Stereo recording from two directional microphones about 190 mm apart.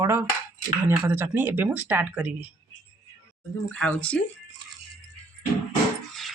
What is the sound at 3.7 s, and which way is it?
Speech, 5° left (ahead or behind).